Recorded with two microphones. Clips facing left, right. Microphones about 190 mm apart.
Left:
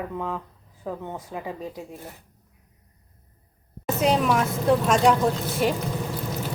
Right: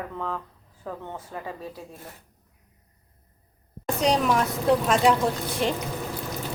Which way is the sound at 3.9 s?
5° left (ahead or behind).